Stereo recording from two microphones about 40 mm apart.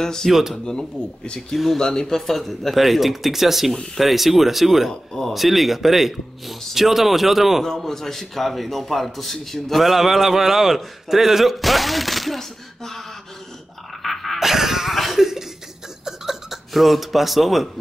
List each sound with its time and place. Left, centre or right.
0.0 s speech: centre
0.3 s speech: centre
0.7 s a man's voice: centre
1.5 s a man's voice: centre
1.8 s a man's voice: centre
7.6 s a man's voice: centre
14.0 s cough: centre
16.1 s a sound: centre